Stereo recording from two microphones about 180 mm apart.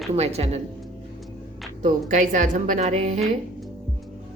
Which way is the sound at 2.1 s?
45° right (ahead or behind).